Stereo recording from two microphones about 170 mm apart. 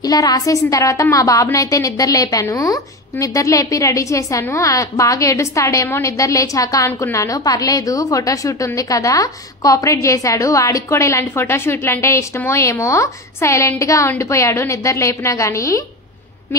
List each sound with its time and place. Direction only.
0.0 s a woman's voice: 20° left (ahead or behind)